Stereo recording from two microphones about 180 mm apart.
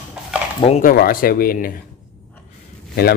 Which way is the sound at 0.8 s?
55° left (ahead or behind).